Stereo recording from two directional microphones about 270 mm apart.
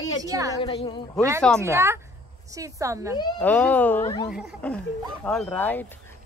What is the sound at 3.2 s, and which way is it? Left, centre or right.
Speech, centre.